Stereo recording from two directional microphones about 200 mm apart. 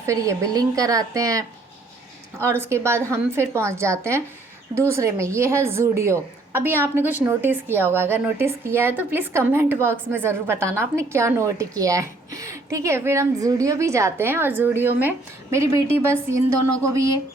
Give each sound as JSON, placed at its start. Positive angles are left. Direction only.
{"t": 0.0, "sound": "a woman's voice", "side_deg": -15}